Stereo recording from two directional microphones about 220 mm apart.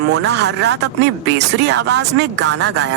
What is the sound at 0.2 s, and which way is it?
Speech, 50° right (ahead or behind).